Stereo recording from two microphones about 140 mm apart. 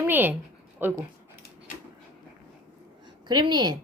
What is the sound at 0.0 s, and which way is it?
A woman's voice, 15° right (ahead or behind).